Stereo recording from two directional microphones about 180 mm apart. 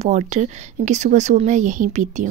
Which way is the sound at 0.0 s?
40° right (ahead or behind).